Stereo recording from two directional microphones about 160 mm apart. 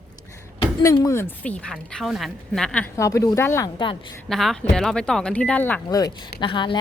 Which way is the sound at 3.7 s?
30° left (ahead or behind).